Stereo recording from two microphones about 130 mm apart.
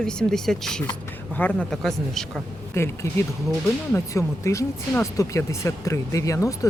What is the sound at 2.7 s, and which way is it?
Speech, 20° left (ahead or behind).